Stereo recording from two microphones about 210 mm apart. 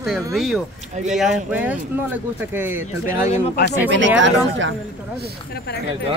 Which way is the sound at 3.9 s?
60° right (ahead or behind).